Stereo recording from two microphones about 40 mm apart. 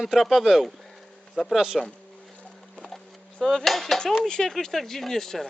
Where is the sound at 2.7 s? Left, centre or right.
Centre.